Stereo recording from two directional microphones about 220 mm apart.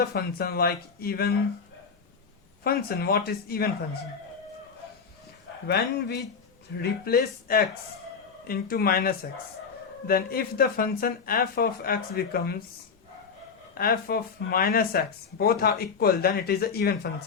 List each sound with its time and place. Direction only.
0.0 s speech: 45° left (ahead or behind)
2.6 s speech: 45° left (ahead or behind)
5.6 s speech: 45° left (ahead or behind)
13.7 s speech: 40° left (ahead or behind)